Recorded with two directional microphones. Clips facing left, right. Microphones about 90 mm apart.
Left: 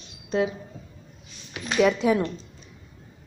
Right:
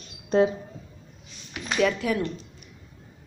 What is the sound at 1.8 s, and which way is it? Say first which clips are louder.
Speech: left 4 dB; 15° left (ahead or behind).